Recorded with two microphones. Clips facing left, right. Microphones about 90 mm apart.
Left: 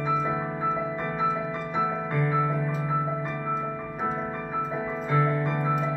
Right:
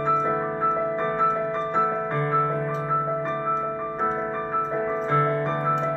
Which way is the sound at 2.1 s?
55° right (ahead or behind).